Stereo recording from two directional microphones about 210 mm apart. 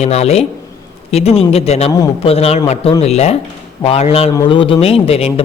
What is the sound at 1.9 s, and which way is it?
Speech, 20° left (ahead or behind).